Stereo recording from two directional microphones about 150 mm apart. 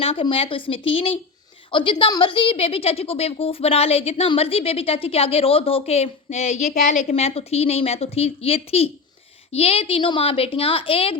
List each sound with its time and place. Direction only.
0.0 s a woman's voice: 40° left (ahead or behind)